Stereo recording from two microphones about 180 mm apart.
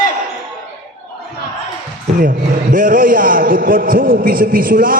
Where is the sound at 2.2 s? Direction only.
50° right (ahead or behind).